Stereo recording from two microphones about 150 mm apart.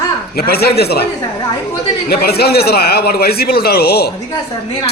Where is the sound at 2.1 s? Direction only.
90° left.